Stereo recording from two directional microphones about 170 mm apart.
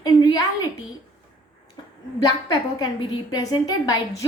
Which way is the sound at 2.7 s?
25° left (ahead or behind).